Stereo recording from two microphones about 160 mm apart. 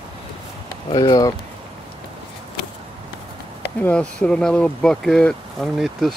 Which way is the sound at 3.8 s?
5° left (ahead or behind).